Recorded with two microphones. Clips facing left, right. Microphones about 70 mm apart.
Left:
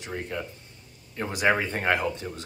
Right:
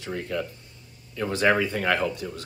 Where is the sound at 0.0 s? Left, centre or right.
Centre.